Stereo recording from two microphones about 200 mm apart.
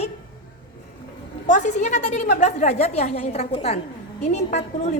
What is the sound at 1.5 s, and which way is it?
A woman's voice, 35° left (ahead or behind).